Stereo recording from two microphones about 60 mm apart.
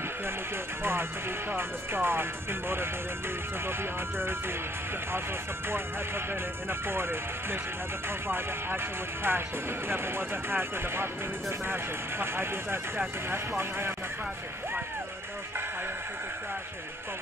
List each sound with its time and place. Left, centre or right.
1.5 s speech: right
6.7 s speech: right
8.3 s speech: right